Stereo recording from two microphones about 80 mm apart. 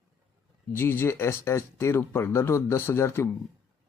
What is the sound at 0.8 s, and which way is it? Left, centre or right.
Speech, left.